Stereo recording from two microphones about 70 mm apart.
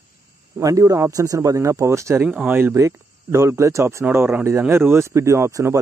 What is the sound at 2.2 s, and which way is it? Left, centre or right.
Speech, centre.